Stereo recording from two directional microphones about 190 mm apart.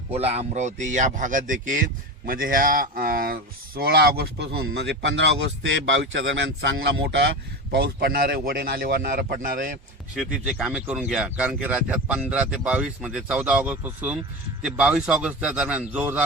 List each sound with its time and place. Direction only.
0.1 s speech: 35° right (ahead or behind)
10.2 s speech: 5° right (ahead or behind)